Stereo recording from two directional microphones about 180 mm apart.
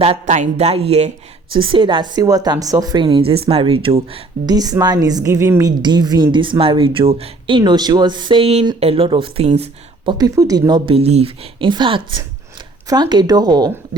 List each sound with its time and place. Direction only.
0.0 s speech: 35° right (ahead or behind)
10.1 s speech: 20° right (ahead or behind)